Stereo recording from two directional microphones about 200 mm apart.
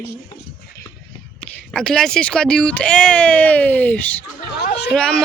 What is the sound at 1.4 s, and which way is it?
Speech, 5° left (ahead or behind).